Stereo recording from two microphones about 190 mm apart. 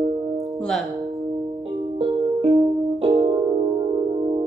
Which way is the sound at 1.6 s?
30° right (ahead or behind).